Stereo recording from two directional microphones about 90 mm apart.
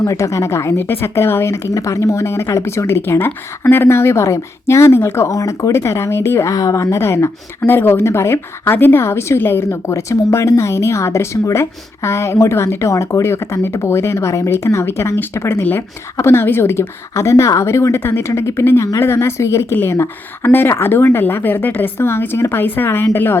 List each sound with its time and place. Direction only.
0.0 s a woman's voice: 35° left (ahead or behind)